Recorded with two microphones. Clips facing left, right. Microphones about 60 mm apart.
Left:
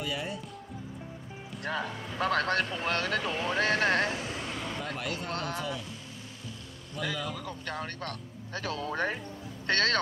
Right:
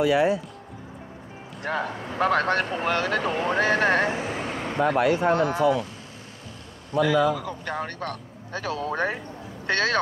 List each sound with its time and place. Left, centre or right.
0.0 s speech: right
1.7 s speech: right
5.3 s speech: centre
7.0 s speech: right
7.3 s speech: centre
7.7 s speech: centre